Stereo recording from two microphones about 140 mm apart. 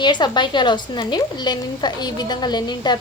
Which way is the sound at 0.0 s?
30° left (ahead or behind).